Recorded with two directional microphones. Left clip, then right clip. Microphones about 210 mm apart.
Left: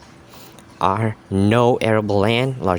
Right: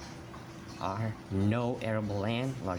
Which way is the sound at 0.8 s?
50° left (ahead or behind).